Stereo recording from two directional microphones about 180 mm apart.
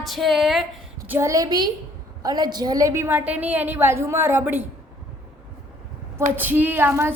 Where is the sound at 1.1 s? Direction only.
15° right (ahead or behind).